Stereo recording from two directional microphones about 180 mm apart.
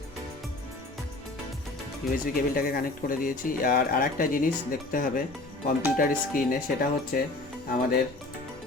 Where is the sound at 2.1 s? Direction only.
55° left (ahead or behind).